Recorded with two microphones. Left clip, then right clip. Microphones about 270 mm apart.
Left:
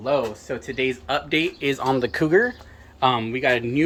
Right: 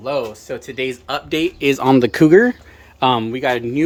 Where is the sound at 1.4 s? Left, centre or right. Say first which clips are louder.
Right 7 dB; right.